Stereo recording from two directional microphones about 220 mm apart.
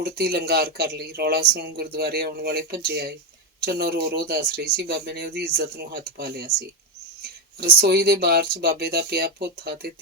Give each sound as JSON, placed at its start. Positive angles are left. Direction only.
{"t": 0.0, "sound": "speech", "side_deg": -45}